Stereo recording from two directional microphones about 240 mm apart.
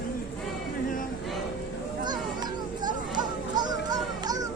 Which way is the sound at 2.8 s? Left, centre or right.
Centre.